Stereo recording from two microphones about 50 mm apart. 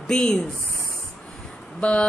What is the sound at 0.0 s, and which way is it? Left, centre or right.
Speech, centre.